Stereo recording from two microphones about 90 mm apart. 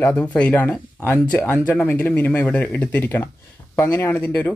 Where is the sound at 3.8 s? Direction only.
35° left (ahead or behind).